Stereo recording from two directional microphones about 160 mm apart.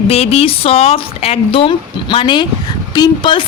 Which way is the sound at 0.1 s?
40° left (ahead or behind).